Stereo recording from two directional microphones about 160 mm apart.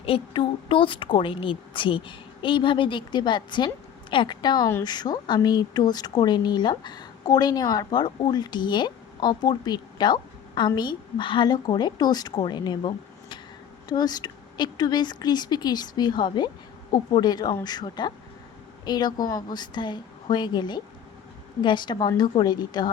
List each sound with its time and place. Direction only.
0.0 s a woman's voice: 35° left (ahead or behind)